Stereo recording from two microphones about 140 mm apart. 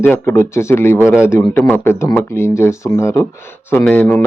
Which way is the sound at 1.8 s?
15° left (ahead or behind).